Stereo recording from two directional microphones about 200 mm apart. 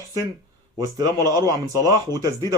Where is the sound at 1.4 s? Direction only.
15° right (ahead or behind).